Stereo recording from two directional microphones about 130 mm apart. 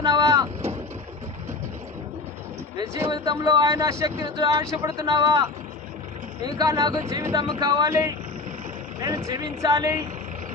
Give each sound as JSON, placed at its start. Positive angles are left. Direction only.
{"t": 0.0, "sound": "vehicle", "side_deg": -30}
{"t": 3.1, "sound": "speech", "side_deg": -35}
{"t": 7.1, "sound": "speech", "side_deg": -20}
{"t": 7.3, "sound": "speech", "side_deg": -30}